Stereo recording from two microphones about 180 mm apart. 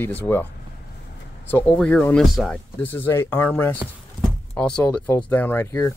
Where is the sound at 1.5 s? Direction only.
10° left (ahead or behind).